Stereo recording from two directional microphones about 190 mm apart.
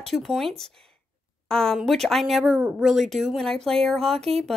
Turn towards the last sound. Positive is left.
turn(degrees=0)  # may be behind; listen again after turning